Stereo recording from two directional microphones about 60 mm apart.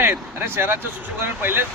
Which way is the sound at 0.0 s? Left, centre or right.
Right.